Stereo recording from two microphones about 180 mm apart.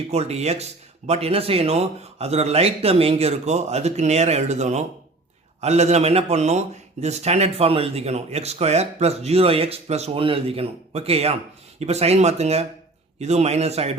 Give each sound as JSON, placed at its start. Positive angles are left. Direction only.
{"t": 0.1, "sound": "a man's voice", "side_deg": -35}